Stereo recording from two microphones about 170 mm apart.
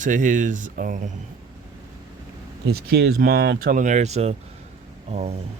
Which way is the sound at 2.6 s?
70° right (ahead or behind).